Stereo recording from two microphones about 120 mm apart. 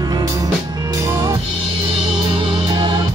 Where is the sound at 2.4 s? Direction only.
40° right (ahead or behind).